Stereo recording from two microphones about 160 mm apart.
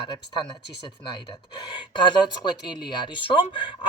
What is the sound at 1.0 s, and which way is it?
Speech, 30° left (ahead or behind).